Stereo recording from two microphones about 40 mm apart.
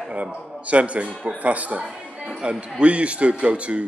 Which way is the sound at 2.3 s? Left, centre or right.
Right.